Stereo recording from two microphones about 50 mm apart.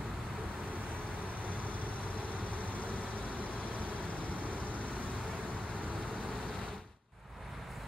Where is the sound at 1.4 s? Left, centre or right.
Left.